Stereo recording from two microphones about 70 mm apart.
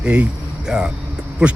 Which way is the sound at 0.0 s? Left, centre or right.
Centre.